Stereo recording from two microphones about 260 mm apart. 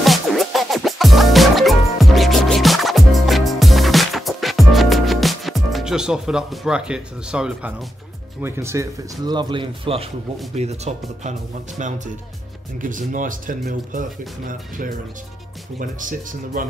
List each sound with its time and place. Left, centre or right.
0.0 s music: centre
8.4 s speech: centre; by 11.3 s right
12.8 s speech: right